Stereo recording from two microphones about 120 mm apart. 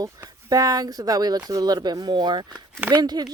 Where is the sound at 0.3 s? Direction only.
30° right (ahead or behind).